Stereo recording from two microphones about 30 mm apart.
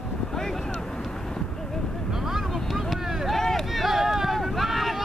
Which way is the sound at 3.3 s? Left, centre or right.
Centre.